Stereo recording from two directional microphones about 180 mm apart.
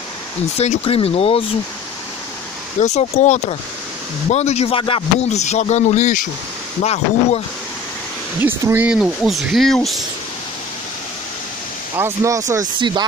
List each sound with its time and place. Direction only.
0.6 s speech: 35° left (ahead or behind)
2.8 s speech: 40° left (ahead or behind)
8.4 s speech: 10° right (ahead or behind)
12.0 s speech: 15° right (ahead or behind)